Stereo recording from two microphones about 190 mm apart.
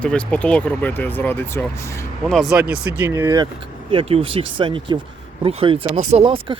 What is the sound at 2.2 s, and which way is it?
Speech, centre (ahead or behind).